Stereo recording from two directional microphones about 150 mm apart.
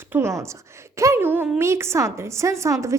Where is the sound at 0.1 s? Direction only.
20° right (ahead or behind).